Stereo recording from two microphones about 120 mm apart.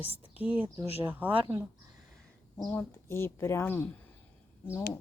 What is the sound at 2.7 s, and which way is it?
Speech, 20° left (ahead or behind).